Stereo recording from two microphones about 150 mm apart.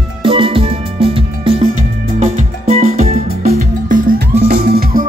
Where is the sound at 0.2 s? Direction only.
35° right (ahead or behind).